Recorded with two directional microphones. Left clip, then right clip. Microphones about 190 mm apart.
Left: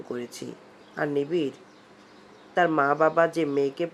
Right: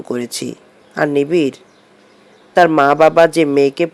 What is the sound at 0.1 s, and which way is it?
Speech, 40° right (ahead or behind).